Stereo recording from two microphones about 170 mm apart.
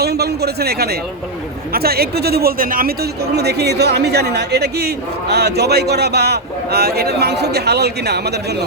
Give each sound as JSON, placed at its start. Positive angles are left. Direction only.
{"t": 0.0, "sound": "speech", "side_deg": -70}